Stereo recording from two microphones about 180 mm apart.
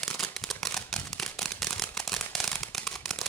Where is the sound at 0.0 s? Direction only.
Centre (ahead or behind).